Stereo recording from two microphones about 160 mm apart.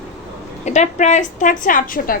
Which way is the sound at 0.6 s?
45° left (ahead or behind).